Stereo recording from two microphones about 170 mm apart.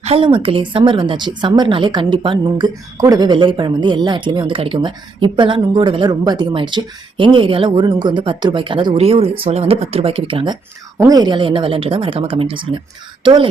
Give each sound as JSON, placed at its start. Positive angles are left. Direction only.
{"t": 0.0, "sound": "speech", "side_deg": -35}